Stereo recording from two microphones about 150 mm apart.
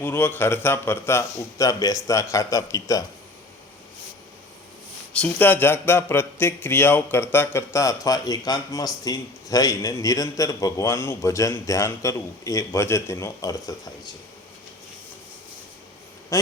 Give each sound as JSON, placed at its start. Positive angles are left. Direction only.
{"t": 0.0, "sound": "a man's voice", "side_deg": 15}
{"t": 5.1, "sound": "a man's voice", "side_deg": 10}
{"t": 16.3, "sound": "a sound", "side_deg": 20}